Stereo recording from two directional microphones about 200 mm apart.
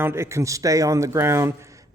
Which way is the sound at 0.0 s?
15° right (ahead or behind).